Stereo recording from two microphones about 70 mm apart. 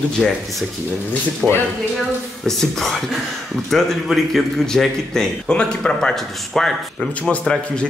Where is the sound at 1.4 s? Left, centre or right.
Centre.